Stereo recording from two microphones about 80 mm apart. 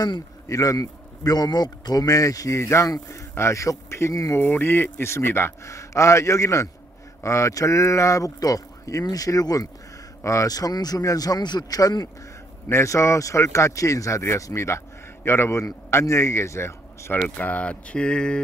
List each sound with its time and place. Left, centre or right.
0.5 s a man's voice: left
4.4 s a man's voice: left
12.6 s a man's voice: left
17.2 s speech: centre